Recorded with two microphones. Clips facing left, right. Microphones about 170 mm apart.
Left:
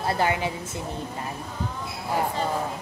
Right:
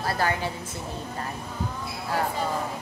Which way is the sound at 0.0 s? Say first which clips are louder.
Left 2 dB; 20° left (ahead or behind).